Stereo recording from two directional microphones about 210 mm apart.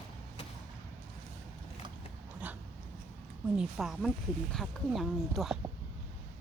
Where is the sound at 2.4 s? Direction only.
5° right (ahead or behind).